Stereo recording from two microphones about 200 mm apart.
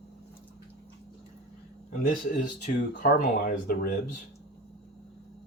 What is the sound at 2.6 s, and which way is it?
Speech, 40° left (ahead or behind).